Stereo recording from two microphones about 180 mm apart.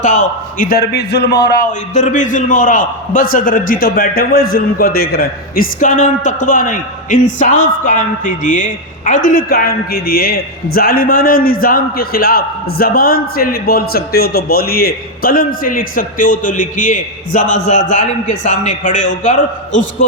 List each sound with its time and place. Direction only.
0.0 s a man's voice: 45° left (ahead or behind); by 1.6 s 65° left (ahead or behind)
1.9 s a man's voice: 40° left (ahead or behind)
9.5 s a man's voice: 55° left (ahead or behind)